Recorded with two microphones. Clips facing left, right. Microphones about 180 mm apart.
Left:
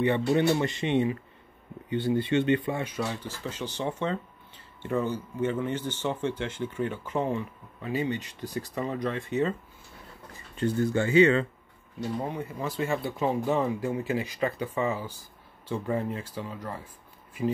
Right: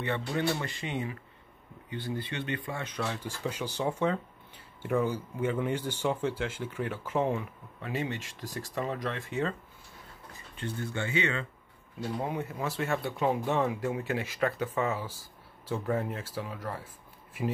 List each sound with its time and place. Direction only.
0.0 s speech: 20° left (ahead or behind)
2.9 s speech: 5° left (ahead or behind)
3.3 s speech: 10° right (ahead or behind)
10.5 s speech: 40° left (ahead or behind)
12.2 s speech: 5° right (ahead or behind)